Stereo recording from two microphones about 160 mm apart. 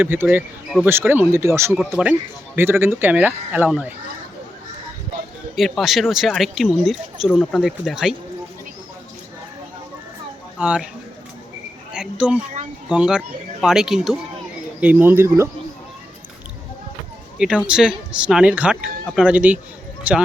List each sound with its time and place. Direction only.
0.0 s a man's voice: 10° right (ahead or behind)
5.5 s speech: centre (ahead or behind)
10.6 s a man's voice: 5° right (ahead or behind)
11.9 s a man's voice: 5° right (ahead or behind)
17.3 s a man's voice: 5° right (ahead or behind)